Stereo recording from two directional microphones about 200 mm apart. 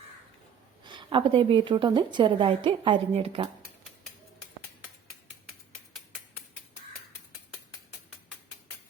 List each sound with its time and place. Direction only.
0.9 s a woman's voice: 25° right (ahead or behind)